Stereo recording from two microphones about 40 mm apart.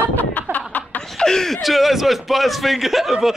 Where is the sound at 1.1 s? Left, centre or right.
Centre.